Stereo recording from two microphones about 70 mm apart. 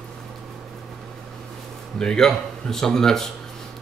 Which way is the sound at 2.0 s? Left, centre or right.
Centre.